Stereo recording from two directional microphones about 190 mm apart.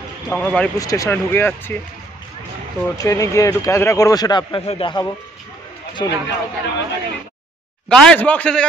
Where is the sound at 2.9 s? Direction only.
15° left (ahead or behind).